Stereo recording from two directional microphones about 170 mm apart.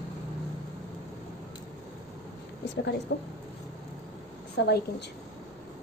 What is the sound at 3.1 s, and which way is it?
Speech, 90° left.